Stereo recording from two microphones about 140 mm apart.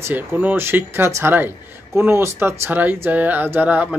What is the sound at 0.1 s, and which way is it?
Speech, 10° right (ahead or behind).